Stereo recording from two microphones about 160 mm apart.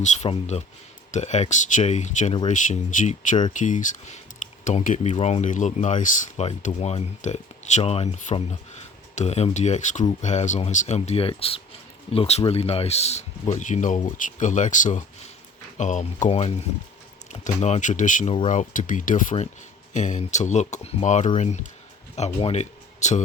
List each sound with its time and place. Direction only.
0.0 s speech: 45° left (ahead or behind)
16.4 s speech: 40° left (ahead or behind)